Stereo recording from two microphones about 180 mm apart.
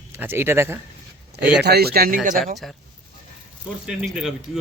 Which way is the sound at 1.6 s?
60° right (ahead or behind).